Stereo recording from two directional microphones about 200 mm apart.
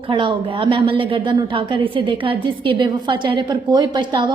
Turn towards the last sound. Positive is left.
turn(degrees=-20)  # may be behind; listen again after turning